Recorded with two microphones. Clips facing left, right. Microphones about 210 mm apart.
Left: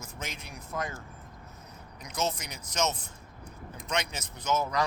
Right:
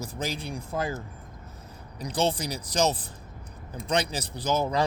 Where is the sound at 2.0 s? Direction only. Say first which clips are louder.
Right 6 dB; 30° right (ahead or behind).